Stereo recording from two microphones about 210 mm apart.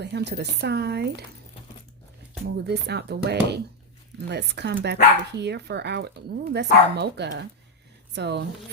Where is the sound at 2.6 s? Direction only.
50° right (ahead or behind).